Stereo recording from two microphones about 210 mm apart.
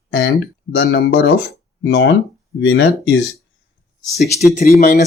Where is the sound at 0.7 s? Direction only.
55° left (ahead or behind).